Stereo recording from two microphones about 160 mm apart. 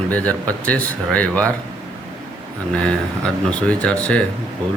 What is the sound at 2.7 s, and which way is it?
A man's voice, 5° left (ahead or behind).